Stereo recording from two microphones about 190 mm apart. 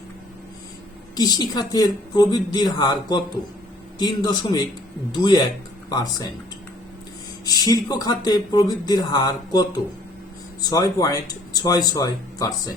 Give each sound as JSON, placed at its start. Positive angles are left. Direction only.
{"t": 1.1, "sound": "speech", "side_deg": 20}
{"t": 7.4, "sound": "speech", "side_deg": 20}